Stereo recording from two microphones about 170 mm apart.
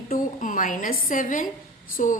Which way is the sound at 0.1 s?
50° left (ahead or behind).